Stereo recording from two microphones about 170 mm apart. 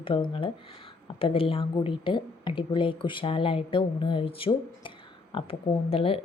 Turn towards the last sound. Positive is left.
turn(degrees=35)  # may be behind; listen again after turning